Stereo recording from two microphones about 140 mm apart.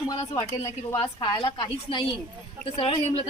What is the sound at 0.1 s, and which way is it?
Speech, 30° left (ahead or behind).